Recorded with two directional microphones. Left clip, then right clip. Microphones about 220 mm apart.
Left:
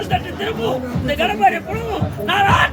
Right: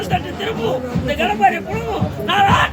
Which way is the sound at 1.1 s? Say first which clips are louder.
Even; 10° left (ahead or behind).